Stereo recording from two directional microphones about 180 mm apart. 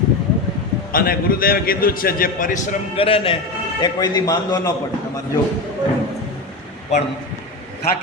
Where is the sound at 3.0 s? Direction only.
30° left (ahead or behind).